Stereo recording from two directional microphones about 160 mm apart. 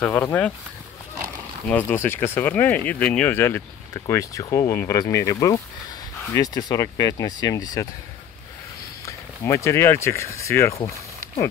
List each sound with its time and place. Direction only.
0.0 s speech: 10° left (ahead or behind)
1.7 s speech: 10° left (ahead or behind)
9.0 s speech: 20° left (ahead or behind)